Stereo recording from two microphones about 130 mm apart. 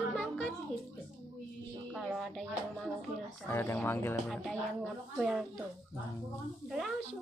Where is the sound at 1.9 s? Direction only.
Centre (ahead or behind).